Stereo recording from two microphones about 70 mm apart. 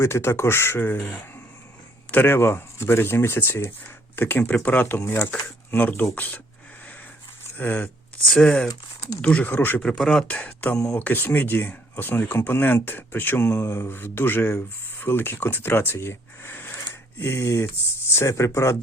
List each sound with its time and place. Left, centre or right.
0.0 s speech: left
7.6 s speech: left
8.3 s speech: centre; by 9.8 s left
9.8 s speech: centre
10.2 s speech: centre; by 18.8 s left